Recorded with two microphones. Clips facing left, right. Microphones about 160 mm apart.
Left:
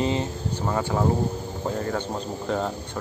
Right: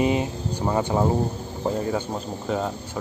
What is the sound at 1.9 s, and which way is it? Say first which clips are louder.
Speech: right 1 dB; 5° right (ahead or behind).